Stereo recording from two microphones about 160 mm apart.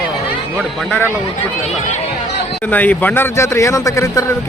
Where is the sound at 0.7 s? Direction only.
Centre (ahead or behind).